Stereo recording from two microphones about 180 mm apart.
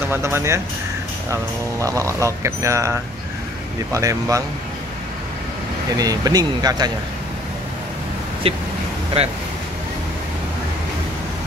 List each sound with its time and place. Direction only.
0.1 s speech: 15° right (ahead or behind)
5.9 s speech: 20° right (ahead or behind)
8.5 s speech: 30° right (ahead or behind)